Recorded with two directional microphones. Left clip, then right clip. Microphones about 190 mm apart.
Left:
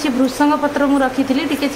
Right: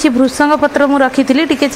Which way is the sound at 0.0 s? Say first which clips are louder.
Right 5 dB; 35° right (ahead or behind).